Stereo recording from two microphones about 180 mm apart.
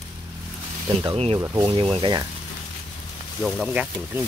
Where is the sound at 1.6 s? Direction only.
30° right (ahead or behind).